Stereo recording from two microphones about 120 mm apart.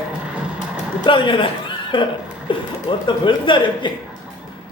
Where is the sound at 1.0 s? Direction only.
45° left (ahead or behind).